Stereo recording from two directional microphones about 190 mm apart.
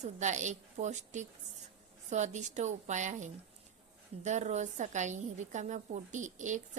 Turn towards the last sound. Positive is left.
turn(degrees=-40)  # may be behind; listen again after turning